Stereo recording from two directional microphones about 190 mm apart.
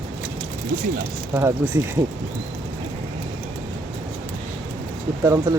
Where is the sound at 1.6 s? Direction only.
10° right (ahead or behind).